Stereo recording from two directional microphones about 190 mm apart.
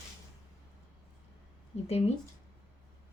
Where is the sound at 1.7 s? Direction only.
35° left (ahead or behind).